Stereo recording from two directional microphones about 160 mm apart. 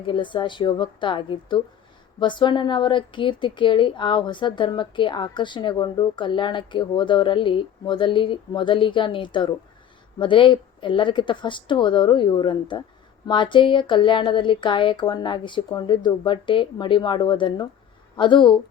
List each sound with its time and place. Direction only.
0.0 s a woman's voice: 30° left (ahead or behind)